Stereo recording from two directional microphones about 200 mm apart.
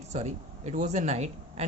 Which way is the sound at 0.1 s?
35° right (ahead or behind).